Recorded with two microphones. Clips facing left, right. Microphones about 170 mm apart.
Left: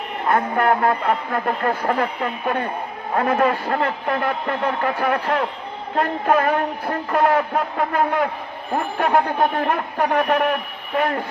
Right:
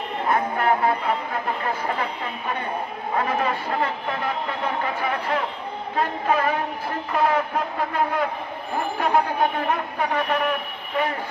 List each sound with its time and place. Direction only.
0.3 s speech: 50° left (ahead or behind)